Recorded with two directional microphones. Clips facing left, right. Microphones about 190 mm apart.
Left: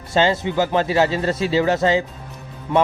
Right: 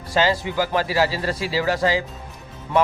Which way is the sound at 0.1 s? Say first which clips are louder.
Left 2 dB; 25° left (ahead or behind).